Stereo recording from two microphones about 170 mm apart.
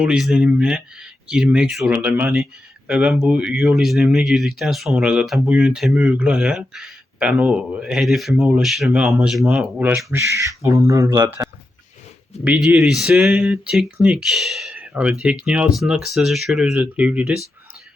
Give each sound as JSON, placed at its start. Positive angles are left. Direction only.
{"t": 0.0, "sound": "speech", "side_deg": -5}
{"t": 12.5, "sound": "speech", "side_deg": -5}